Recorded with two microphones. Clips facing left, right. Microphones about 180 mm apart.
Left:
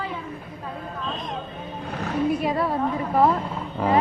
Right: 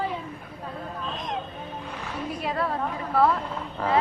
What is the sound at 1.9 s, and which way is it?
Speech, 45° left (ahead or behind).